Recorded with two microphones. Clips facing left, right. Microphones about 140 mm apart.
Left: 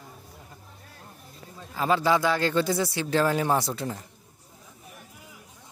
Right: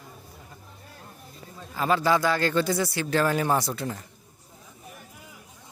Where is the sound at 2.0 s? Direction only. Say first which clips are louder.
Right 1 dB; 5° left (ahead or behind).